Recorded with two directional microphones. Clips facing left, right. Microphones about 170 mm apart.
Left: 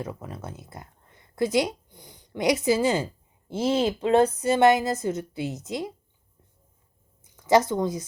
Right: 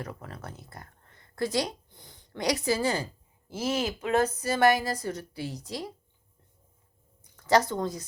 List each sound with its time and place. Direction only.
0.0 s a woman's voice: 20° left (ahead or behind)
7.3 s speech: 20° left (ahead or behind)